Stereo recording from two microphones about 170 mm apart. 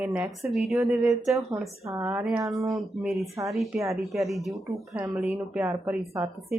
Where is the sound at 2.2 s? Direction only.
Centre (ahead or behind).